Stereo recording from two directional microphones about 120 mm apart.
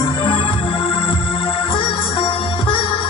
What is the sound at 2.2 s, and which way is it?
Music, 45° left (ahead or behind).